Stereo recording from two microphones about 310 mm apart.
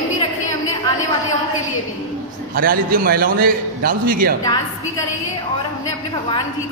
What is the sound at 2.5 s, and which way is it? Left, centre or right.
A man's voice, right.